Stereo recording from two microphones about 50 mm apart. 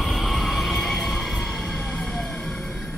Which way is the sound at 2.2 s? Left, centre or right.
Centre.